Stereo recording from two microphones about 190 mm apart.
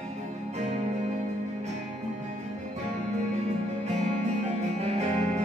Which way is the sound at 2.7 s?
35° right (ahead or behind).